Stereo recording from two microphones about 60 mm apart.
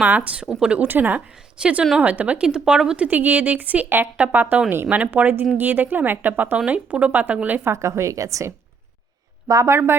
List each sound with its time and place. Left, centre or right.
0.3 s speech: centre
0.8 s a woman's voice: right
1.6 s speech: centre
2.0 s speech: right
2.5 s speech: centre
3.8 s a woman's voice: right
4.7 s a woman's voice: right
7.7 s a woman's voice: right
9.6 s speech: right